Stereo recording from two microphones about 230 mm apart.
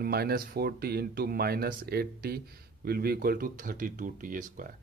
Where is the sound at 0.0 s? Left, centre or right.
Right.